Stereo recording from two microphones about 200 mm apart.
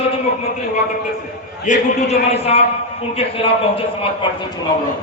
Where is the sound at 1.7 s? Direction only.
40° left (ahead or behind).